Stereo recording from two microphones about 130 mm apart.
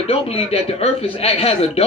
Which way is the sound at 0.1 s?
50° left (ahead or behind).